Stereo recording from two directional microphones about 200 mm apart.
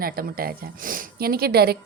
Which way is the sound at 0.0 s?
50° right (ahead or behind).